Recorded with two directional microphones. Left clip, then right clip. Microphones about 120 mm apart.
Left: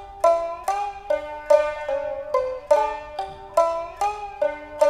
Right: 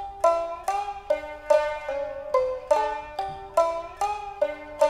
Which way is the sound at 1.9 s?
30° left (ahead or behind).